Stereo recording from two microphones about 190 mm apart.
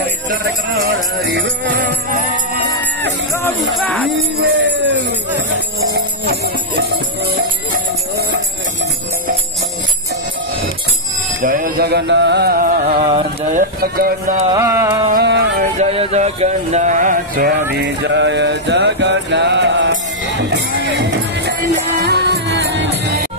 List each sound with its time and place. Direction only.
3.7 s speech: 5° left (ahead or behind)
4.4 s a sound: 55° right (ahead or behind)
6.4 s music: 55° right (ahead or behind)
11.4 s music: 45° right (ahead or behind)
14.5 s music: 15° right (ahead or behind)
15.2 s music: 65° right (ahead or behind)
15.8 s music: 35° right (ahead or behind)
17.7 s mantra: 65° right (ahead or behind)
21.9 s music: 60° right (ahead or behind)